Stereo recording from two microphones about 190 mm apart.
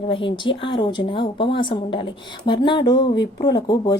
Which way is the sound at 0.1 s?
25° left (ahead or behind).